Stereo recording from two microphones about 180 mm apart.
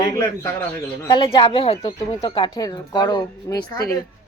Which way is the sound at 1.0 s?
25° left (ahead or behind).